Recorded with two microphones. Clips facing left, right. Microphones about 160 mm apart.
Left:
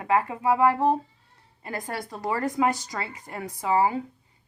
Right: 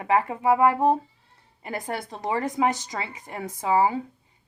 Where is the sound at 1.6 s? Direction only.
25° right (ahead or behind).